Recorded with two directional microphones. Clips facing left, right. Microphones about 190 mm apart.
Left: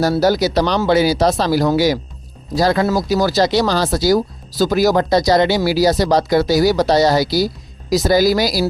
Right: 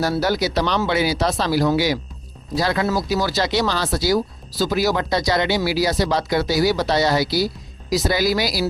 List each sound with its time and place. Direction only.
0.0 s speech: 40° left (ahead or behind)